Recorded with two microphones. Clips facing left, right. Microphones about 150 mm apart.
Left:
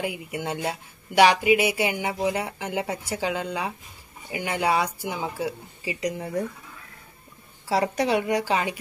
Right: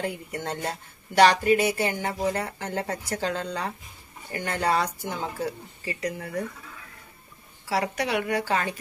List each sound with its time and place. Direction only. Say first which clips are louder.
0.0 s speech: left 1 dB; 10° left (ahead or behind)
7.6 s a woman's voice: left 4 dB; 25° left (ahead or behind)